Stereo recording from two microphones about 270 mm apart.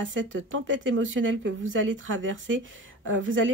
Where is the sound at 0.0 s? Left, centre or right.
Right.